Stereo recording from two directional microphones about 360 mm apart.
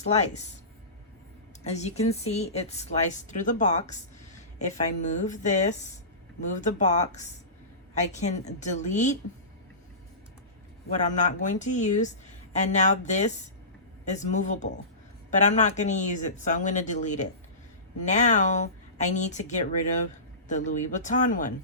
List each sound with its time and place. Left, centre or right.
0.0 s speech: centre
1.6 s a woman's voice: centre
10.8 s a woman's voice: centre